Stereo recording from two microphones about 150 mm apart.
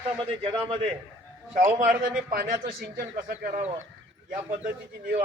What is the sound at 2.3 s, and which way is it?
Speech, 75° right (ahead or behind).